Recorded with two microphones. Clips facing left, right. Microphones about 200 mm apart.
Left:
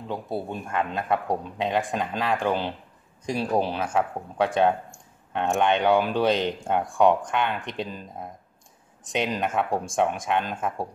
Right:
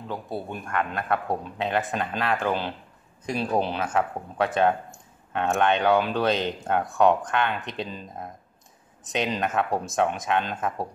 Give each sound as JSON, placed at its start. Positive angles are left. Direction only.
{"t": 0.5, "sound": "speech", "side_deg": 20}